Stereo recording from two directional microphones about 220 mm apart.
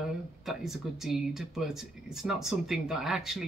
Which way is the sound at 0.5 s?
Centre (ahead or behind).